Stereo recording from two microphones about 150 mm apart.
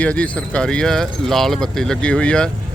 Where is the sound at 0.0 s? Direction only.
10° left (ahead or behind).